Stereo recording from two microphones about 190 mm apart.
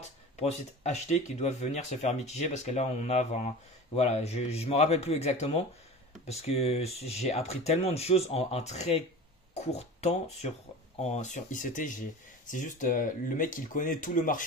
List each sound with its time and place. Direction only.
0.0 s speech: 35° left (ahead or behind)